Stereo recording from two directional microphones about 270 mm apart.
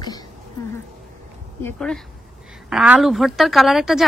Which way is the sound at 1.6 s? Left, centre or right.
Centre.